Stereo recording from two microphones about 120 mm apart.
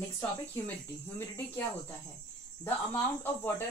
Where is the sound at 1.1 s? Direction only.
20° left (ahead or behind).